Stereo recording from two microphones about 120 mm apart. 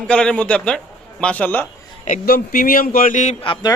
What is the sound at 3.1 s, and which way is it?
Speech, 90° left.